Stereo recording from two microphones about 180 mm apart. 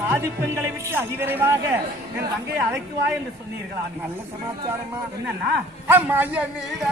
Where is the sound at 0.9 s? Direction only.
10° right (ahead or behind).